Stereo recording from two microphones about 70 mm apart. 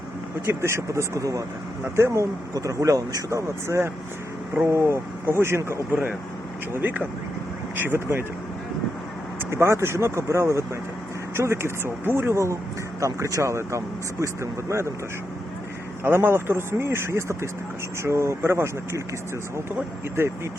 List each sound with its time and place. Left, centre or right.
0.4 s speech: right
2.0 s speech: right
2.6 s speech: right
9.5 s speech: right
16.0 s speech: right